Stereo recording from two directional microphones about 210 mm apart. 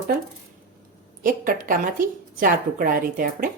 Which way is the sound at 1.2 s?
40° right (ahead or behind).